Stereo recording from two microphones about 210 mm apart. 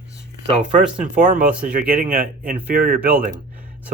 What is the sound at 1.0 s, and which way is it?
Speech, 40° right (ahead or behind).